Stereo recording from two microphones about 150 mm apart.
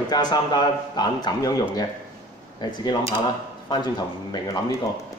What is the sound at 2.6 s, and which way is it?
A man's voice, 30° left (ahead or behind).